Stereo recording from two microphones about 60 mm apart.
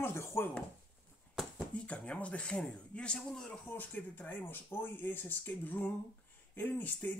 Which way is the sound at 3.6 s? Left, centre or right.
Left.